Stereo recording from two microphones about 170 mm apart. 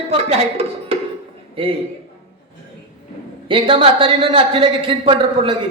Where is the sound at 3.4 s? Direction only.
30° right (ahead or behind).